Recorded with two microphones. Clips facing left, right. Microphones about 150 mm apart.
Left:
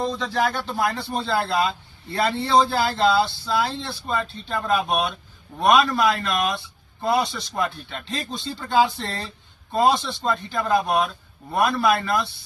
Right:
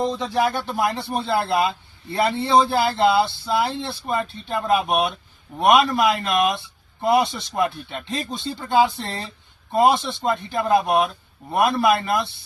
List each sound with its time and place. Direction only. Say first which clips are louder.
0.3 s speech: right 2 dB; 15° right (ahead or behind)